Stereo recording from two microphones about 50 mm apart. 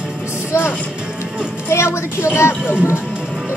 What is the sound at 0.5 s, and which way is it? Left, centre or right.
Music, left.